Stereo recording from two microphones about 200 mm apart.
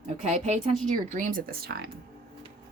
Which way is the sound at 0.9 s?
40° right (ahead or behind).